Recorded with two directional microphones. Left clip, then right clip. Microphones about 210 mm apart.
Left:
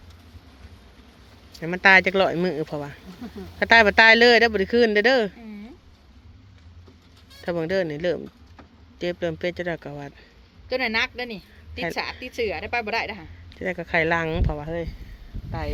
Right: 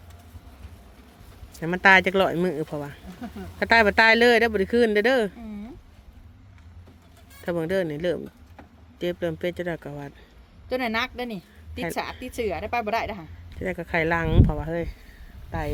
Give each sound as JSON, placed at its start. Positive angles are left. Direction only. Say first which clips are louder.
{"t": 1.6, "sound": "speech", "louder": "left 1 dB", "side_deg": -15}
{"t": 7.4, "sound": "speech", "louder": "left 1 dB", "side_deg": -5}
{"t": 10.7, "sound": "speech", "louder": "left 2 dB", "side_deg": -60}
{"t": 13.6, "sound": "speech", "louder": "left 2 dB", "side_deg": -5}